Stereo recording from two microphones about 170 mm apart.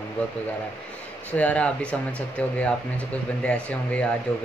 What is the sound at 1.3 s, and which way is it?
Speech, 10° left (ahead or behind).